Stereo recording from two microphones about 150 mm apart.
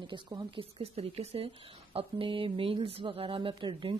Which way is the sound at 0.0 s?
30° right (ahead or behind).